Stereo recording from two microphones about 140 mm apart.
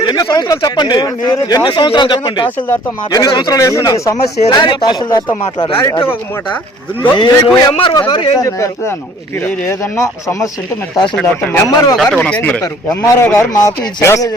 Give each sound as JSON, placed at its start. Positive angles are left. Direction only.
{"t": 0.0, "sound": "speech", "side_deg": 30}
{"t": 5.5, "sound": "speech", "side_deg": 35}
{"t": 5.8, "sound": "speech", "side_deg": 20}
{"t": 7.0, "sound": "speech", "side_deg": 35}
{"t": 8.4, "sound": "speech", "side_deg": 20}
{"t": 11.1, "sound": "speech", "side_deg": 10}
{"t": 11.9, "sound": "speech", "side_deg": 5}
{"t": 12.6, "sound": "speech", "side_deg": 25}